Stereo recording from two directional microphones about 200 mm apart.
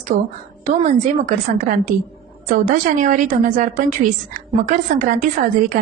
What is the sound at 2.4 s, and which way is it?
A woman's voice, 40° right (ahead or behind).